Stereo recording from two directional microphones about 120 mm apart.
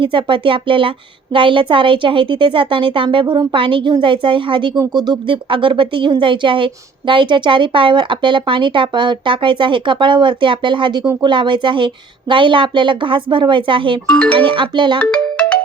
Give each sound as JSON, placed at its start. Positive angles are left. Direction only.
{"t": 0.0, "sound": "speech", "side_deg": -45}
{"t": 14.1, "sound": "speech", "side_deg": 10}
{"t": 14.3, "sound": "speech", "side_deg": -45}
{"t": 14.9, "sound": "ringtone", "side_deg": 10}